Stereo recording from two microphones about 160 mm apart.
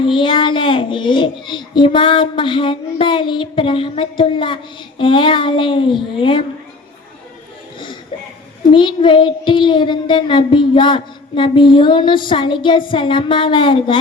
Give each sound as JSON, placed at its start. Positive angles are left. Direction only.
{"t": 0.0, "sound": "a child's voice", "side_deg": 30}
{"t": 8.7, "sound": "a child's voice", "side_deg": 30}